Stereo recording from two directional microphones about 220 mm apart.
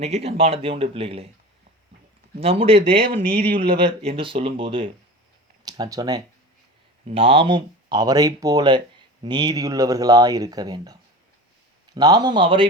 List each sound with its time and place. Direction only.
0.0 s speech: 30° right (ahead or behind)
2.4 s speech: 25° right (ahead or behind)
11.9 s speech: 20° right (ahead or behind)